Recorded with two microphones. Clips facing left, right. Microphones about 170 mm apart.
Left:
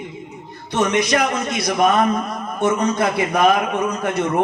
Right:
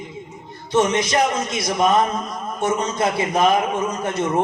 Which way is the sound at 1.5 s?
25° right (ahead or behind).